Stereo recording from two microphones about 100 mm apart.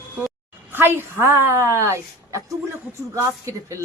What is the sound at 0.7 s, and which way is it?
A woman's voice, 20° right (ahead or behind).